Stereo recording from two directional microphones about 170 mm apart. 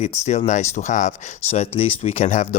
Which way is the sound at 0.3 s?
45° left (ahead or behind).